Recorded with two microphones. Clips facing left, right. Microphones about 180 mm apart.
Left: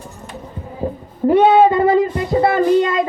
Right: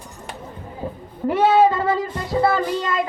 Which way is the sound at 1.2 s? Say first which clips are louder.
Left 5 dB; 20° left (ahead or behind).